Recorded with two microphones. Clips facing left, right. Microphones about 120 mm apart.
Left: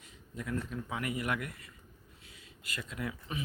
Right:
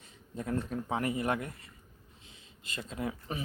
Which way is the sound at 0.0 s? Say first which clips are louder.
Right 3 dB; 30° right (ahead or behind).